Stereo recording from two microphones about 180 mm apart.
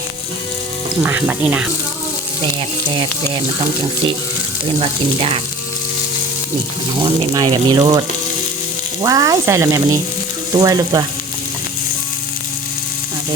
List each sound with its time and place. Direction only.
1.0 s speech: 10° right (ahead or behind)
4.8 s speech: 35° right (ahead or behind)
7.0 s sizzle: 25° right (ahead or behind)